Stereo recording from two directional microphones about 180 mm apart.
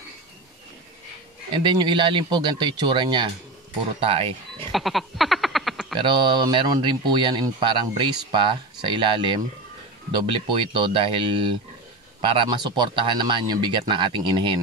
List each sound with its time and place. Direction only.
1.5 s speech: 25° right (ahead or behind)
4.7 s a sound: centre (ahead or behind)
5.9 s speech: 25° right (ahead or behind)